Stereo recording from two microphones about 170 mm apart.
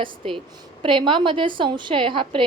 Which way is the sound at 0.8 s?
30° right (ahead or behind).